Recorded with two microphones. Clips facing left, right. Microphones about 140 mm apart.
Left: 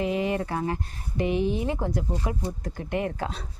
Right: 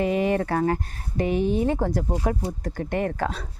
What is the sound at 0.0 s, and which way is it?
A woman's voice, 55° right (ahead or behind).